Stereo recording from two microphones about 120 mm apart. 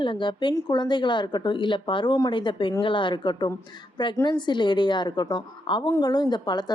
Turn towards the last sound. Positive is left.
turn(degrees=35)  # may be behind; listen again after turning